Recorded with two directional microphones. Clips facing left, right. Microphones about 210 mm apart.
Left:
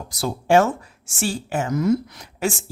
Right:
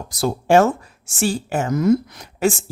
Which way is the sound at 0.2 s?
40° right (ahead or behind).